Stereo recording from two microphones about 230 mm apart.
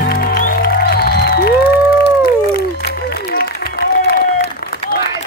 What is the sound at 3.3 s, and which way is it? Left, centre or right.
Applause, left.